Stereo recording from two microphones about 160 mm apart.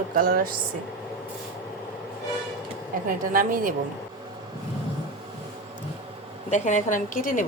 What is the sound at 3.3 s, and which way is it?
Speech, 60° right (ahead or behind).